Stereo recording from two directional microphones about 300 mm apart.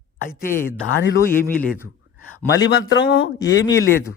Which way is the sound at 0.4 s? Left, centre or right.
Left.